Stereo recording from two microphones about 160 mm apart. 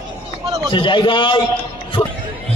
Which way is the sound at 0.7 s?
30° left (ahead or behind).